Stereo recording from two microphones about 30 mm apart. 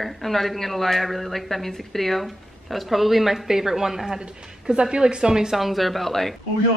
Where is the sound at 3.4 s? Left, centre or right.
Centre.